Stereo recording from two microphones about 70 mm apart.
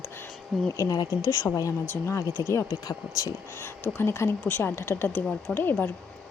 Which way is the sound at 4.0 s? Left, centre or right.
Left.